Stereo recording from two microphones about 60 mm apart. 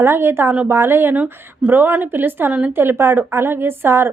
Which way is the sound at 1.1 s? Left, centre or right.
Right.